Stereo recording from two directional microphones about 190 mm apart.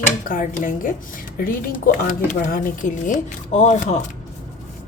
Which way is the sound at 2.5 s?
45° left (ahead or behind).